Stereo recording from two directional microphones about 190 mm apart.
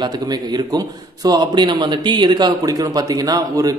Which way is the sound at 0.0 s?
20° right (ahead or behind).